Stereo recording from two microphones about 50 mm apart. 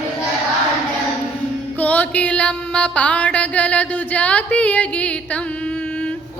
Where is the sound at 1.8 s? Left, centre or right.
Left.